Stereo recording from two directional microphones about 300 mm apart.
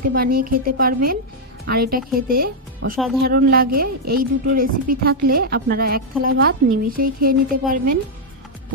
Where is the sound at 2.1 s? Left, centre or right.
Right.